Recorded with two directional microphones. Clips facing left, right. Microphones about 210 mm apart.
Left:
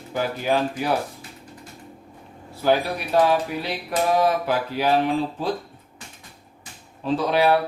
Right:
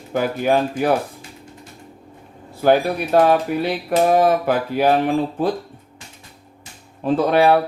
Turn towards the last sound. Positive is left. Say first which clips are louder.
# right 5 dB
turn(degrees=-50)  # may be behind; listen again after turning